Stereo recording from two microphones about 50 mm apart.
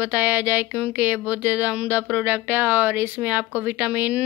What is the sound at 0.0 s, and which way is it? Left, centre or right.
A woman's voice, right.